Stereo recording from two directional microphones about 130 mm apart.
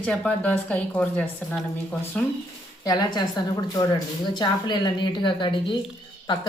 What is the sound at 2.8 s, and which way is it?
A woman's voice, 30° left (ahead or behind).